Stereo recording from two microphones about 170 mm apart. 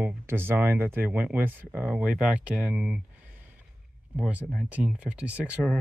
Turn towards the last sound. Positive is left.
turn(degrees=-5)  # may be behind; listen again after turning